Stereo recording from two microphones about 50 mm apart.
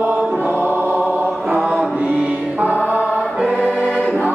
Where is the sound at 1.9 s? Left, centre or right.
Right.